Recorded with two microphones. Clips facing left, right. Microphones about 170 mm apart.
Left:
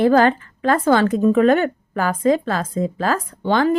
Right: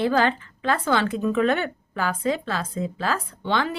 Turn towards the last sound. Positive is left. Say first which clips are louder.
# left 8 dB
turn(degrees=45)  # may be behind; listen again after turning